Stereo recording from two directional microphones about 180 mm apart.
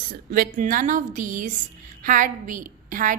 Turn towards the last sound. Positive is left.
turn(degrees=-50)  # may be behind; listen again after turning